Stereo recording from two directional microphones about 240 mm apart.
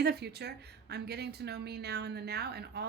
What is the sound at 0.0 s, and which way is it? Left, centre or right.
A woman's voice, right.